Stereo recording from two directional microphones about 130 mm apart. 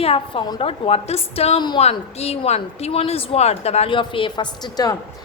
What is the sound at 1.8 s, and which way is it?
A woman's voice, 55° left (ahead or behind).